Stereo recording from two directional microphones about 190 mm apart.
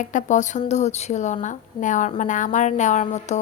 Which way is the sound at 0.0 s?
40° left (ahead or behind).